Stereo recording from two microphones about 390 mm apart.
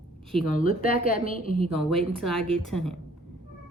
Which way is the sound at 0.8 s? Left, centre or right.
Left.